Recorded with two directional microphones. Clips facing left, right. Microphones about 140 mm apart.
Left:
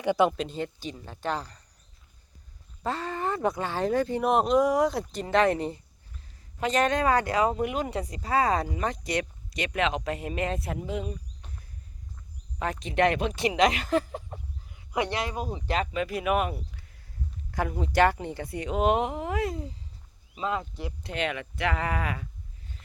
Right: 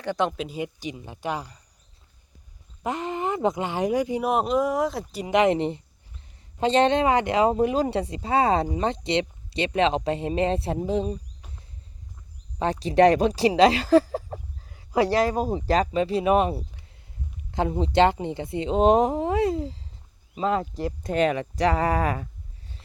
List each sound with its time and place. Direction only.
0.0 s speech: 10° left (ahead or behind); by 1.6 s 10° right (ahead or behind)
2.8 s speech: 15° right (ahead or behind); by 5.2 s centre (ahead or behind)
5.2 s speech: 15° right (ahead or behind); by 11.2 s 30° right (ahead or behind)
12.5 s speech: 30° right (ahead or behind)